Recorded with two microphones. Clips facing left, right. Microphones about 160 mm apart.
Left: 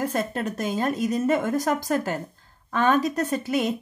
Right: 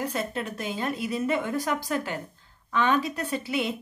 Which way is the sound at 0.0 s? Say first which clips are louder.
Left 4 dB; 45° left (ahead or behind).